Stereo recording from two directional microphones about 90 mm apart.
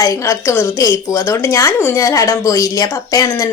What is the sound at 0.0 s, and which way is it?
A woman's voice, 35° left (ahead or behind).